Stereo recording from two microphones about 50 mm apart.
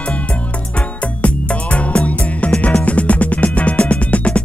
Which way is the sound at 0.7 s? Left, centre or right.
Left.